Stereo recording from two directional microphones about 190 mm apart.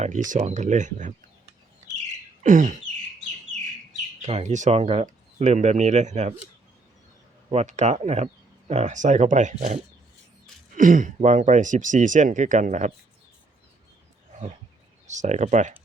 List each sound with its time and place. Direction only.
0.0 s speech: 40° right (ahead or behind)
2.4 s a sound: 45° right (ahead or behind)
4.2 s speech: 35° right (ahead or behind)
7.5 s speech: 35° right (ahead or behind)
15.0 s speech: 40° right (ahead or behind)